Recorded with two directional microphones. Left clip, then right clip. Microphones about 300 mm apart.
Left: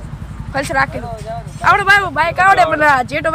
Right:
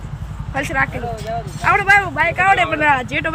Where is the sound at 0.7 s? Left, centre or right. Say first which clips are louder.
Left 3 dB; centre.